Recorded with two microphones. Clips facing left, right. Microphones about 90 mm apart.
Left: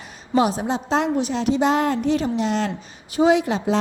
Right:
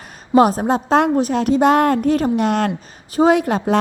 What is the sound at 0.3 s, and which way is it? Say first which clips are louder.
A woman's voice: right 6 dB; 45° right (ahead or behind).